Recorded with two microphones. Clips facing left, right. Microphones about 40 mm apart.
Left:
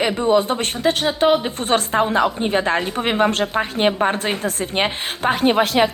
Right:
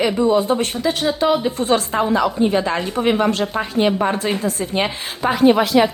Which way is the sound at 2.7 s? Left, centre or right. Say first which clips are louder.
Right 1 dB; left.